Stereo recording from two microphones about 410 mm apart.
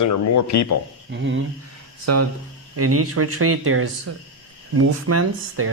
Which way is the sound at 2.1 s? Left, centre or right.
Right.